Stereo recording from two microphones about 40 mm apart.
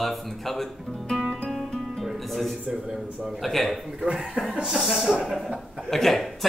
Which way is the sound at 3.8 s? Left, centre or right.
Centre.